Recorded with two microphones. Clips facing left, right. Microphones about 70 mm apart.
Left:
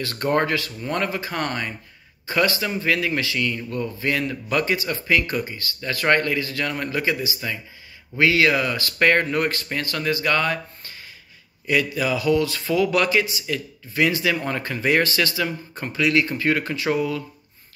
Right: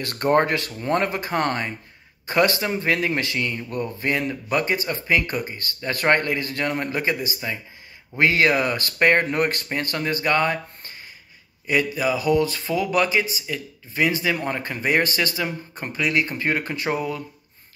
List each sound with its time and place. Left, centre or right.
0.2 s speech: right
1.3 s a man's voice: right
2.3 s a man's voice: right
9.0 s a man's voice: right